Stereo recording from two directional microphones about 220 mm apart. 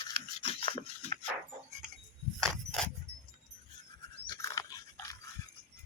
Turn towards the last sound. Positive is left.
turn(degrees=15)  # may be behind; listen again after turning